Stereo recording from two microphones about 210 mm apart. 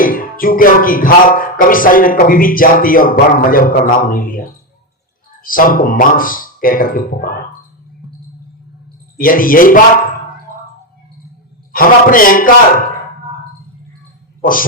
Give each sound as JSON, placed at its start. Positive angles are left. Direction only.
{"t": 0.0, "sound": "music", "side_deg": 40}
{"t": 9.1, "sound": "music", "side_deg": 40}
{"t": 11.7, "sound": "music", "side_deg": 40}